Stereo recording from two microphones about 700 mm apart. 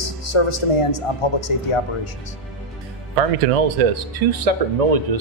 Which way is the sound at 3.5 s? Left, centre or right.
Right.